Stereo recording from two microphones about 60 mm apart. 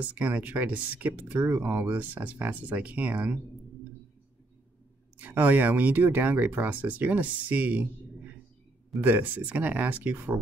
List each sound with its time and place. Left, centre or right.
0.0 s speech: right
5.2 s speech: right
9.0 s speech: right